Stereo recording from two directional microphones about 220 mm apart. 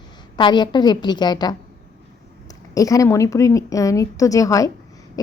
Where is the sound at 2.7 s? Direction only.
15° left (ahead or behind).